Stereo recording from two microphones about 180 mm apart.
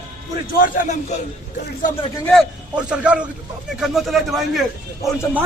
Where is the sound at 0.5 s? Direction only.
50° left (ahead or behind).